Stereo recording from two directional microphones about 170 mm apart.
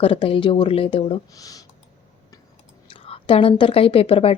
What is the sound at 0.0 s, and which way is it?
A woman's voice, 30° left (ahead or behind).